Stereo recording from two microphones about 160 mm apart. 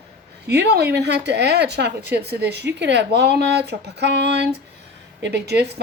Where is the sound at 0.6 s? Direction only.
90° right.